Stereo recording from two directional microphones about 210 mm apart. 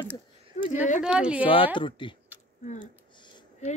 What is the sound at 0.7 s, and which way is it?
Speech, 35° left (ahead or behind).